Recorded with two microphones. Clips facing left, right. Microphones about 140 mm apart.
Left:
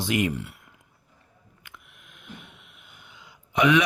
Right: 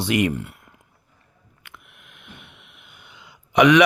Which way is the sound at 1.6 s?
65° right (ahead or behind).